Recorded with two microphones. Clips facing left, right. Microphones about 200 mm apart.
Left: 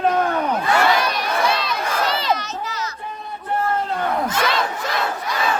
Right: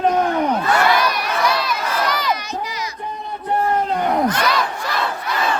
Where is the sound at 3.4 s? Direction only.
20° right (ahead or behind).